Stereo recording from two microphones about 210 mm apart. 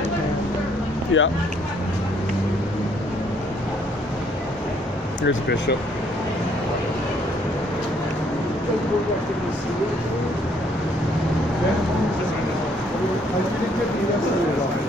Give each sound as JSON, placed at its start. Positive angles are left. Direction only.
{"t": 1.1, "sound": "speech", "side_deg": 65}
{"t": 5.2, "sound": "speech", "side_deg": 55}